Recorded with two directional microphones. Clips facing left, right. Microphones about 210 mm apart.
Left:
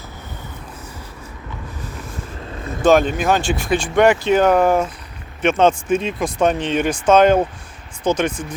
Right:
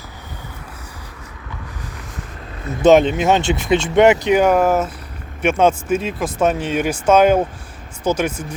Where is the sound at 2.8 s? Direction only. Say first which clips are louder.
Right 3 dB; 20° right (ahead or behind).